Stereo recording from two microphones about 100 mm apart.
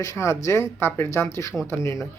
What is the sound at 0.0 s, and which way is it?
Speech, 30° left (ahead or behind).